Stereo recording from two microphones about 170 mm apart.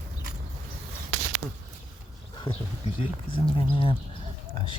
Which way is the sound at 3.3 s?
30° left (ahead or behind).